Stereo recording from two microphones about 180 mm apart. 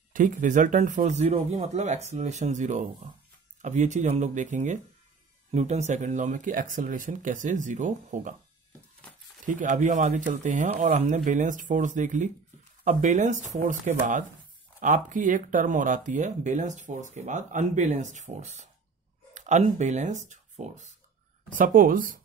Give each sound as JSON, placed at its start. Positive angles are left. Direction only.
{"t": 0.1, "sound": "speech", "side_deg": -45}
{"t": 9.4, "sound": "speech", "side_deg": -45}